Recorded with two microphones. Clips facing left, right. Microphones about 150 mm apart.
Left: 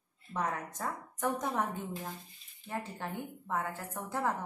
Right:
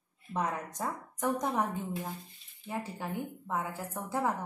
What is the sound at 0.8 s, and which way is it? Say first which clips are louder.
A woman's voice: right 1 dB; 15° right (ahead or behind).